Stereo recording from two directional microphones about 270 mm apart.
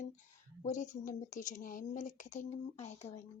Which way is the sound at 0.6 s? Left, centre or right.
Left.